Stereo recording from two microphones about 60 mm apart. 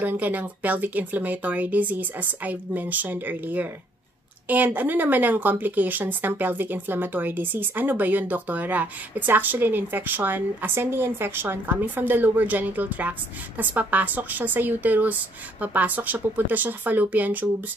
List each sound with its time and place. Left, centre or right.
0.0 s a woman's voice: right